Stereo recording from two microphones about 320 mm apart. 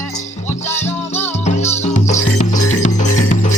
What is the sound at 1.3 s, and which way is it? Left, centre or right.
Music, left.